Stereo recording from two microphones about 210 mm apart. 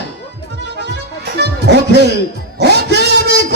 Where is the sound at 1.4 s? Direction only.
55° right (ahead or behind).